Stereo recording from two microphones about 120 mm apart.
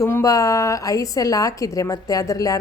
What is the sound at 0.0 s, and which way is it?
A woman's voice, 25° left (ahead or behind).